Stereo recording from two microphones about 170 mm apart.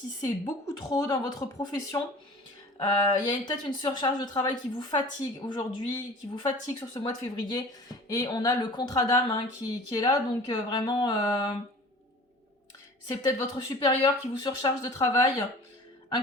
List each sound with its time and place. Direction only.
0.2 s speech: 25° left (ahead or behind)
13.1 s speech: 25° left (ahead or behind)